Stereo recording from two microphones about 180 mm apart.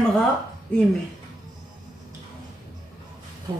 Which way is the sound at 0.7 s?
5° left (ahead or behind).